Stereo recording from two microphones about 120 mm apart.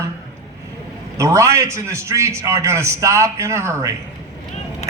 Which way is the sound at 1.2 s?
25° right (ahead or behind).